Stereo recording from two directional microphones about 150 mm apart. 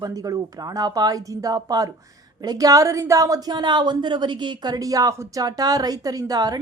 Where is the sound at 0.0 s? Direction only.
25° right (ahead or behind).